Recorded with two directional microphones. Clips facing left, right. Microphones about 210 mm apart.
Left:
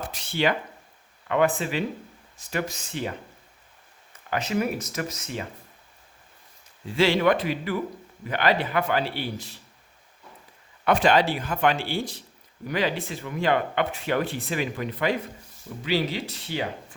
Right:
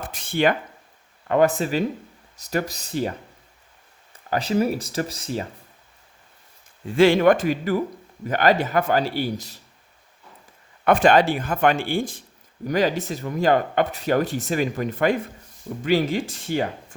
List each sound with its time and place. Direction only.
0.1 s a sound: 50° right (ahead or behind)
1.3 s a man's voice: 40° right (ahead or behind)
4.3 s a man's voice: 35° right (ahead or behind)
6.9 s a man's voice: 50° right (ahead or behind)
10.8 s speech: 50° right (ahead or behind)